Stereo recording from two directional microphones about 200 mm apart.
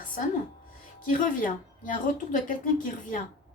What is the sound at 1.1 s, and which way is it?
A woman's voice, 40° left (ahead or behind).